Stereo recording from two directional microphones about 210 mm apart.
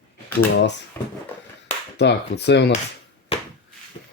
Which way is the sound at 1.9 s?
55° left (ahead or behind).